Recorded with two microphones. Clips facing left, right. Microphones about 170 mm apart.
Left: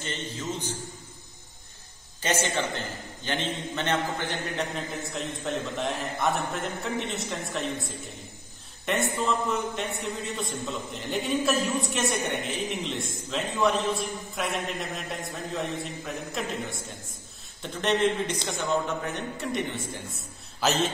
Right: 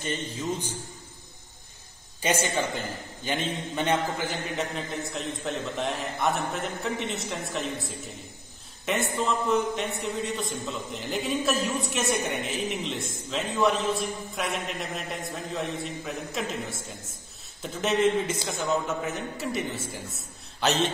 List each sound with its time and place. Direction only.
0.0 s a man's voice: 10° right (ahead or behind)
2.4 s a man's voice: 10° right (ahead or behind)